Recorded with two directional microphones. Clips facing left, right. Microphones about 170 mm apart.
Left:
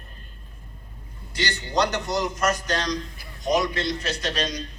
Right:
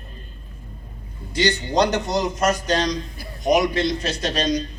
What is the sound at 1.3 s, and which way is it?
A man's voice, 20° right (ahead or behind).